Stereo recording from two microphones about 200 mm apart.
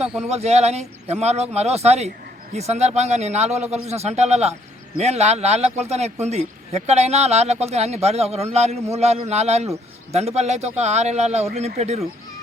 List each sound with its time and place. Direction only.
0.3 s a man's voice: 30° right (ahead or behind)